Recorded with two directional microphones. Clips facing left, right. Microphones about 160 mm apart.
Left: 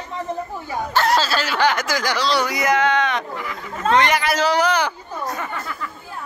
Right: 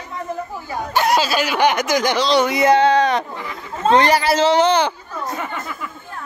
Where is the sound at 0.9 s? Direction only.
15° right (ahead or behind).